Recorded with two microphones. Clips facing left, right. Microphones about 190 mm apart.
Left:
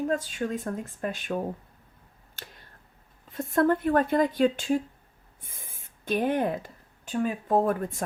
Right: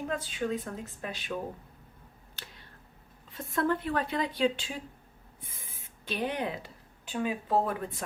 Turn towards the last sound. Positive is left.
turn(degrees=45)  # may be behind; listen again after turning